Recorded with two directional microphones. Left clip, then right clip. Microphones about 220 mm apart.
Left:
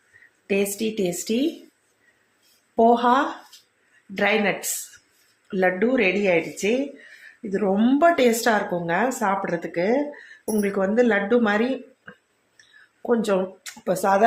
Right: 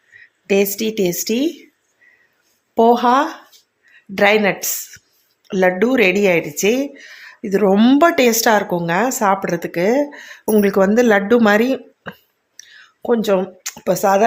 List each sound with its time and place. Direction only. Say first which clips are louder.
0.4 s speech: right 7 dB; 35° right (ahead or behind)
2.7 s speech: right 5 dB; 35° right (ahead or behind)
12.5 s a sound: right 10 dB; 30° right (ahead or behind)